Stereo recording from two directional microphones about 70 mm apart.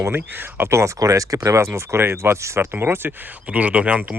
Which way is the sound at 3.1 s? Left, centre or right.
Right.